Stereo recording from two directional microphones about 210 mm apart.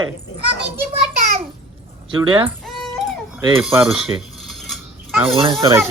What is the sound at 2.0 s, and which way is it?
Speech, 25° right (ahead or behind).